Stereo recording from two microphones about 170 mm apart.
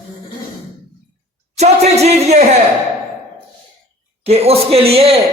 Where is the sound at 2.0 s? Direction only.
40° right (ahead or behind).